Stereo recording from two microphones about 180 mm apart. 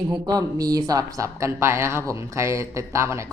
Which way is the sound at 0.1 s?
20° right (ahead or behind).